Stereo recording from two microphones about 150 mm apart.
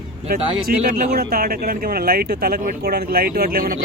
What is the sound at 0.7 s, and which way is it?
Speech, 80° right.